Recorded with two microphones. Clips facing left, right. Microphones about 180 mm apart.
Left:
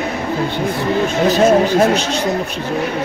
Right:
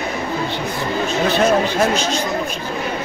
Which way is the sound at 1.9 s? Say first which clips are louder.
Left 2 dB; 65° left (ahead or behind).